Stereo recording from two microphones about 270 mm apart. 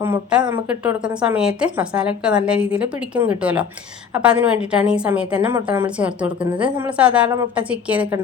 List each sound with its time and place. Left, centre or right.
0.0 s a woman's voice: centre